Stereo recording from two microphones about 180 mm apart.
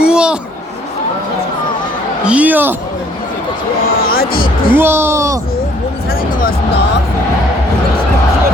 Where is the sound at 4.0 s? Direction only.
55° left (ahead or behind).